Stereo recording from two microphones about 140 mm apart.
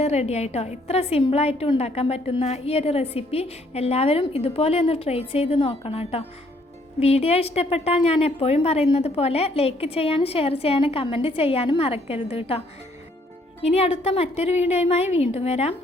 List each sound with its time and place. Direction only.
0.0 s a woman's voice: 50° left (ahead or behind)